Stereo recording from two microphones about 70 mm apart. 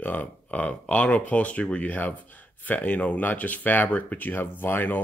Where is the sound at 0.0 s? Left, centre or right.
Left.